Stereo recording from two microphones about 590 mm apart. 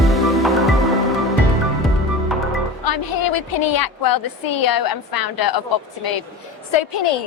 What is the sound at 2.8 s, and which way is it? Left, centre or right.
A woman's voice, left.